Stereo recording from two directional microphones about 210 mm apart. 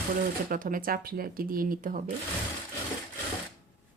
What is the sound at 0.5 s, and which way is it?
Speech, 40° right (ahead or behind).